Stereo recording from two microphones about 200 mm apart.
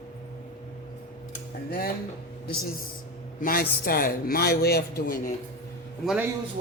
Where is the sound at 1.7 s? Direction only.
50° left (ahead or behind).